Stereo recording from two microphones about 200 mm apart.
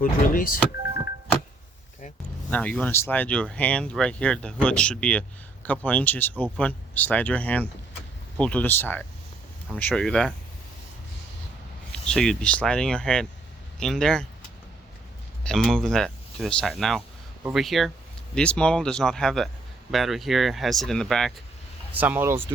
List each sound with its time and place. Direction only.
0.0 s speech: 45° left (ahead or behind)
2.5 s speech: 5° left (ahead or behind)
11.9 s speech: 5° left (ahead or behind)
15.4 s speech: 5° left (ahead or behind)
21.9 s speech: 10° right (ahead or behind)